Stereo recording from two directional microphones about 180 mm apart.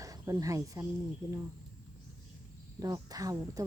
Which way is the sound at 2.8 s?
20° right (ahead or behind).